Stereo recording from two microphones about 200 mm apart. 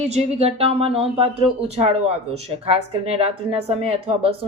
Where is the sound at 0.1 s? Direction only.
30° right (ahead or behind).